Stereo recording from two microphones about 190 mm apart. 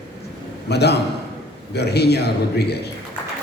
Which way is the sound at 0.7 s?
60° left (ahead or behind).